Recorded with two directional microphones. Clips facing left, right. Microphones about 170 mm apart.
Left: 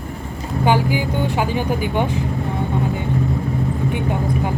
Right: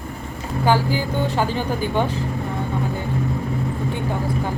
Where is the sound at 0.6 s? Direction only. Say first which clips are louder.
Left 1 dB; 15° left (ahead or behind).